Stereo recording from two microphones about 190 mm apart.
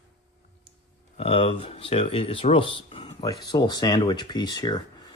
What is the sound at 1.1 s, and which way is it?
Speech, 30° left (ahead or behind).